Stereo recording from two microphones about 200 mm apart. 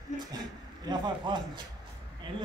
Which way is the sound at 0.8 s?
20° right (ahead or behind).